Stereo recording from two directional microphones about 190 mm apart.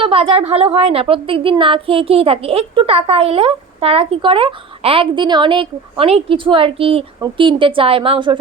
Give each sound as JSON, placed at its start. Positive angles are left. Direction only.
{"t": 0.0, "sound": "a woman's voice", "side_deg": -30}